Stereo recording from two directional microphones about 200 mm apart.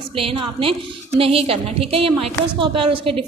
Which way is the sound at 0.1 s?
25° right (ahead or behind).